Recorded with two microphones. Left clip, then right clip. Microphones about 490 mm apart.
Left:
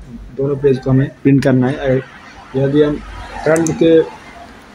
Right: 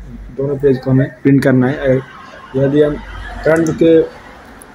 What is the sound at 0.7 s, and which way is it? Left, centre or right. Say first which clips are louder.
Speech: right 2 dB; right.